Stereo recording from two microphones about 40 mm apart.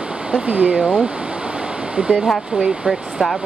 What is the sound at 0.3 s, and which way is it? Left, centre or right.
Speech, right.